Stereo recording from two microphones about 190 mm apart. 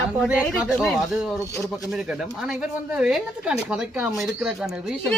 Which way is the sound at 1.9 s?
5° right (ahead or behind).